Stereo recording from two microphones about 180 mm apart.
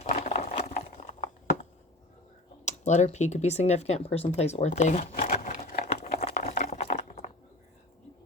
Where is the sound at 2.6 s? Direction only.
40° left (ahead or behind).